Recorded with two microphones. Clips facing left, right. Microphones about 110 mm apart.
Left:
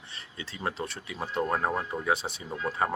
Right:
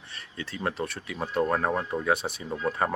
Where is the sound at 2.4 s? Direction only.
5° right (ahead or behind).